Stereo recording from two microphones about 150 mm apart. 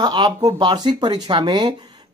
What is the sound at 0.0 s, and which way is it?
Speech, 30° right (ahead or behind).